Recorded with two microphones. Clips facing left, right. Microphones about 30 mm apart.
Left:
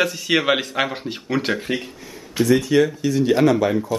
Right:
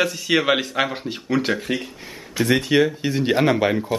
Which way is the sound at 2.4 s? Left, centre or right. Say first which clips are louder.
Left 2 dB; right.